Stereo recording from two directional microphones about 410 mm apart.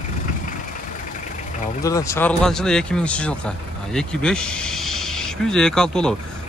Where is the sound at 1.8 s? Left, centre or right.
Centre.